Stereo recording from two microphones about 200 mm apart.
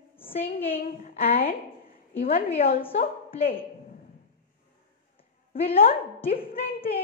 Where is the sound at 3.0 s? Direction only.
30° left (ahead or behind).